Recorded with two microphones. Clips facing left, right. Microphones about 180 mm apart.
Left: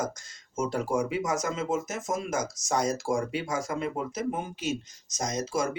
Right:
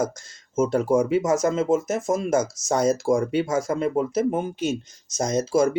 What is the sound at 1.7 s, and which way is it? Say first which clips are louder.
Speech: right 8 dB; 50° right (ahead or behind).